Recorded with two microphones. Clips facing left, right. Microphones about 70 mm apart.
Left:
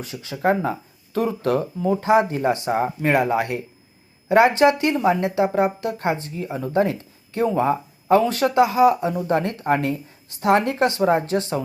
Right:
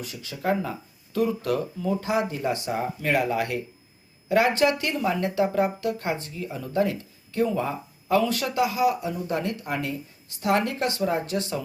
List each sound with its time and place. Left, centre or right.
0.0 s speech: left